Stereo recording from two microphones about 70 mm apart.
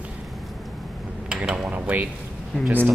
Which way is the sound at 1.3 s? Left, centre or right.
Centre.